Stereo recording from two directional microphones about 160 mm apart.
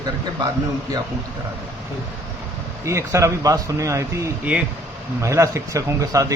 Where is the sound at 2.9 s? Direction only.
20° right (ahead or behind).